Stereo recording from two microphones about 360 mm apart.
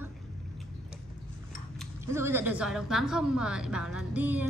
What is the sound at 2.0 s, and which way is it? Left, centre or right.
A woman's voice, centre.